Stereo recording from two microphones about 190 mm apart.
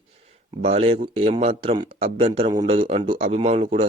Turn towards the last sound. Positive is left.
turn(degrees=-30)  # may be behind; listen again after turning